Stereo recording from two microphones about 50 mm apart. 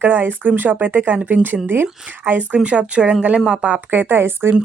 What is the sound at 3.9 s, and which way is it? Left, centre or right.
Speech, right.